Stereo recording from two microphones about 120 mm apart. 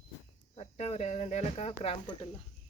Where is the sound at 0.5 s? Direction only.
65° left (ahead or behind).